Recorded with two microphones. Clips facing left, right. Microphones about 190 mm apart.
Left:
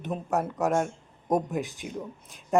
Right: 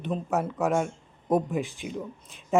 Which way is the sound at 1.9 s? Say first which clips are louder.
Right 1 dB; centre (ahead or behind).